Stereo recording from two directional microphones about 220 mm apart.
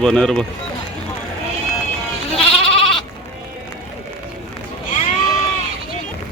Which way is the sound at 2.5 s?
25° left (ahead or behind).